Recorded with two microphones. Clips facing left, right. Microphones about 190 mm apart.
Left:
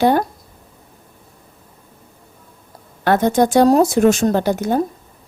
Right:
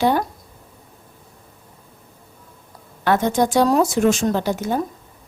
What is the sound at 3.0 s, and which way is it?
Speech, 55° left (ahead or behind).